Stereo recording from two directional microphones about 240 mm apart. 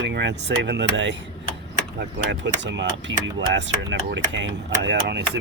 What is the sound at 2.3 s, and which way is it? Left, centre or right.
Speech, right.